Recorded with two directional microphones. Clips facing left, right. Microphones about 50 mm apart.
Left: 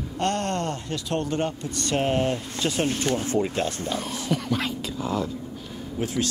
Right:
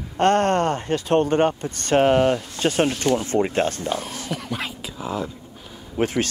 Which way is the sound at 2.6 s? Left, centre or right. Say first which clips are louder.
Right 4 dB; right.